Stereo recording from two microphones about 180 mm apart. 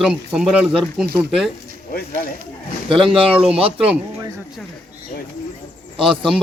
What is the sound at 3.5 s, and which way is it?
Speech, 30° right (ahead or behind).